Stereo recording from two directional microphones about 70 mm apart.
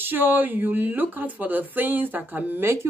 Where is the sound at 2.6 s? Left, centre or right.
Right.